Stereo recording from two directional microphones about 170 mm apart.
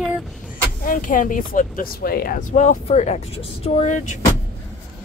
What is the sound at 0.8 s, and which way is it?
Speech, 50° left (ahead or behind).